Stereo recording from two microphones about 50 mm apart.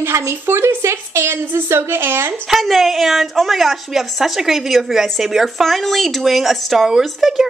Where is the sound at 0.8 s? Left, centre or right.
Right.